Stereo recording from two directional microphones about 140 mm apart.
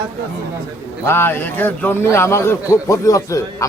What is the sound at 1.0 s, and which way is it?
A man's voice, 15° left (ahead or behind).